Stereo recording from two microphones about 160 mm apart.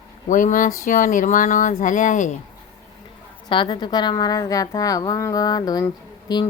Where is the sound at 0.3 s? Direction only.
55° left (ahead or behind).